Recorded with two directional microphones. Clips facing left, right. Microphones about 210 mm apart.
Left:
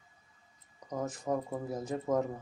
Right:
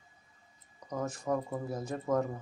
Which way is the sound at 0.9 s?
15° left (ahead or behind).